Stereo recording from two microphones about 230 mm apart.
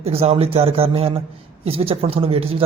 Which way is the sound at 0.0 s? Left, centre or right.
Right.